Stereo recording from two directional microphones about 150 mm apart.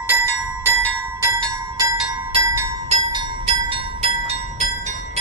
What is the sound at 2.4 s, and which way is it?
Music, 20° right (ahead or behind).